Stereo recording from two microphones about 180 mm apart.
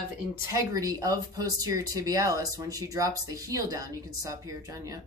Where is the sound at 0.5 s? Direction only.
20° right (ahead or behind).